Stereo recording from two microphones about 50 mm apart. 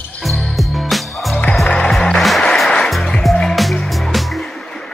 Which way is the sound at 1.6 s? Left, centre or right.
Centre.